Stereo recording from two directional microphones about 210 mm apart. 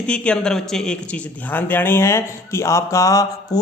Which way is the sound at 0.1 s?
5° left (ahead or behind).